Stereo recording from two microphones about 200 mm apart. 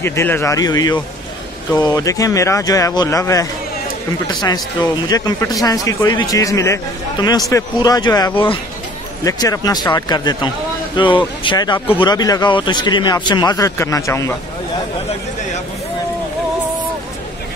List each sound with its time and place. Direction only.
0.0 s a man's voice: 10° left (ahead or behind)